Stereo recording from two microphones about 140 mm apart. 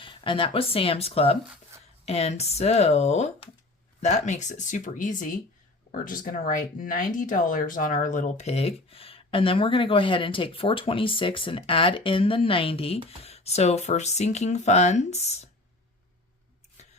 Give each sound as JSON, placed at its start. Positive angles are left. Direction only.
{"t": 0.0, "sound": "speech", "side_deg": 40}
{"t": 5.9, "sound": "speech", "side_deg": 85}